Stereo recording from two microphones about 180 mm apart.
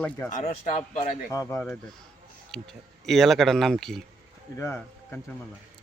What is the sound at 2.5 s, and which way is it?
Speech, centre (ahead or behind).